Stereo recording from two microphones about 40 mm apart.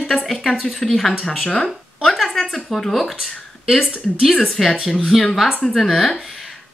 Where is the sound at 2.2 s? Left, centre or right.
Centre.